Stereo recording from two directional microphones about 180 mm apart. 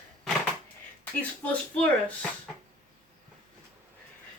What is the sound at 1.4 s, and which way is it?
Speech, 10° left (ahead or behind).